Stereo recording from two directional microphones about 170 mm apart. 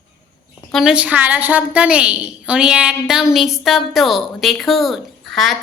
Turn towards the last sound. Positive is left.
turn(degrees=0)  # may be behind; listen again after turning